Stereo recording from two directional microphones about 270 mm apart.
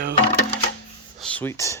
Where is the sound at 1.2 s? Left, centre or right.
Centre.